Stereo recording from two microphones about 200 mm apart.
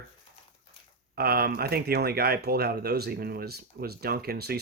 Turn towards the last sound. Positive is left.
turn(degrees=-50)  # may be behind; listen again after turning